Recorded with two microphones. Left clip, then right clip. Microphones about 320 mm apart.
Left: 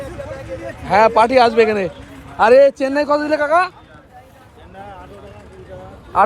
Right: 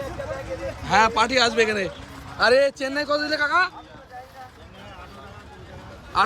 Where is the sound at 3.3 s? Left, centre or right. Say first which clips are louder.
Left 4 dB; centre.